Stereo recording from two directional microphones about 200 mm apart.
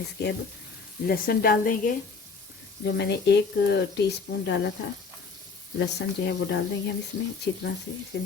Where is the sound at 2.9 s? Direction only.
60° left (ahead or behind).